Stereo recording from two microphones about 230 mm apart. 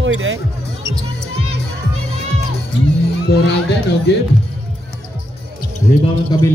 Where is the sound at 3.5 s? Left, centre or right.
Left.